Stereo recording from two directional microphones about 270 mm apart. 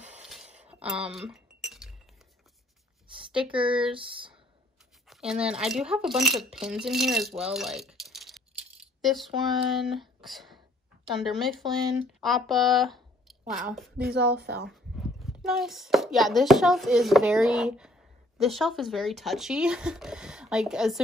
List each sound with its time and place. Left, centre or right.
0.1 s a sound: centre
1.0 s chink: centre
3.5 s speech: centre
5.0 s speech: centre
14.0 s speech: right
14.7 s speech: centre